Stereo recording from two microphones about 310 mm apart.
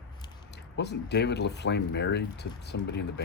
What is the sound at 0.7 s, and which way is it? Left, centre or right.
Speech, left.